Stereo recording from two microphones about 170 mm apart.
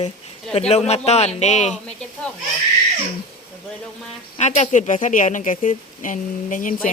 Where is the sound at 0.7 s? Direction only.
40° left (ahead or behind).